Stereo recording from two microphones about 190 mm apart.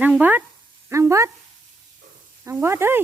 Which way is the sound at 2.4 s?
10° right (ahead or behind).